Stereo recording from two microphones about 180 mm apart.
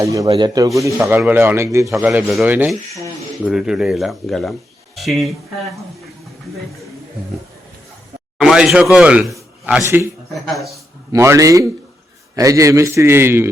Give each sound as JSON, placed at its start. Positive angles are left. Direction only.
{"t": 0.0, "sound": "a man's voice", "side_deg": -20}
{"t": 1.0, "sound": "a man's voice", "side_deg": -5}
{"t": 2.0, "sound": "a man's voice", "side_deg": -5}
{"t": 8.4, "sound": "a man's voice", "side_deg": -5}
{"t": 11.1, "sound": "a man's voice", "side_deg": -15}